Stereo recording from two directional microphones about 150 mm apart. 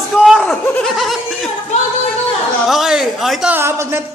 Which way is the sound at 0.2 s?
Centre (ahead or behind).